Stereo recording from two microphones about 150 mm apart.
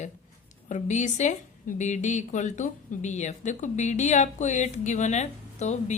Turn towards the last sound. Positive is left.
turn(degrees=50)  # may be behind; listen again after turning